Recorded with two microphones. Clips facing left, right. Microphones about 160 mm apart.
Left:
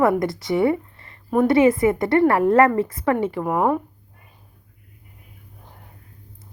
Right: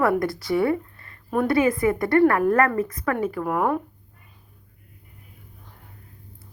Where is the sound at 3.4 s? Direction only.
10° left (ahead or behind).